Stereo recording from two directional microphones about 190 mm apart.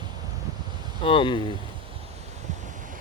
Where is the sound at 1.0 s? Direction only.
25° left (ahead or behind).